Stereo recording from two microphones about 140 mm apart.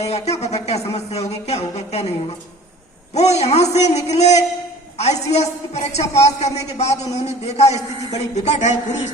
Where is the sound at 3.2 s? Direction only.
50° left (ahead or behind).